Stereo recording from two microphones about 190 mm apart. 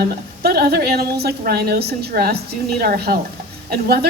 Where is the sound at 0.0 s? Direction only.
55° right (ahead or behind).